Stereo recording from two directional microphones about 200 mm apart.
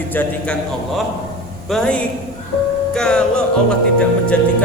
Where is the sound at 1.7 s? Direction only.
5° left (ahead or behind).